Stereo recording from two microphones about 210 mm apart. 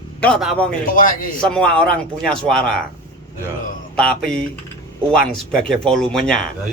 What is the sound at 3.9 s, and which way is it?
Speech, 5° left (ahead or behind).